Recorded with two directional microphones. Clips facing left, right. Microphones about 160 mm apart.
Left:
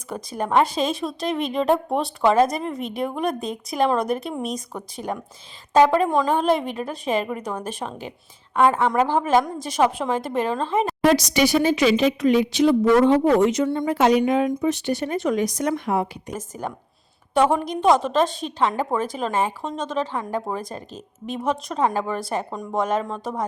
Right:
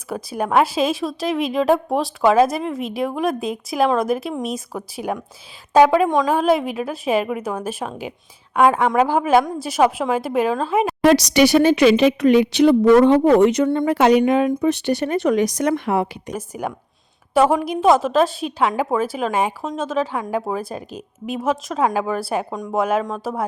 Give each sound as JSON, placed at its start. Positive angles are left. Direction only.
{"t": 0.1, "sound": "speech", "side_deg": -10}
{"t": 11.0, "sound": "speech", "side_deg": -70}
{"t": 16.3, "sound": "speech", "side_deg": -10}